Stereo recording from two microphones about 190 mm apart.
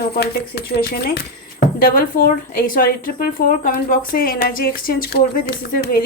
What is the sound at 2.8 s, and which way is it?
Speech, 50° left (ahead or behind).